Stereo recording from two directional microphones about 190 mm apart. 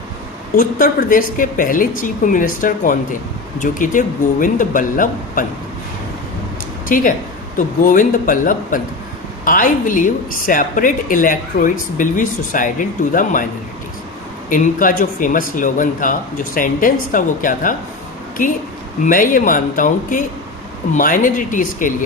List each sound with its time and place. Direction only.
0.5 s a woman's voice: 45° left (ahead or behind)
6.8 s a woman's voice: 45° left (ahead or behind)
14.5 s a woman's voice: 45° left (ahead or behind)
19.0 s a woman's voice: 45° left (ahead or behind)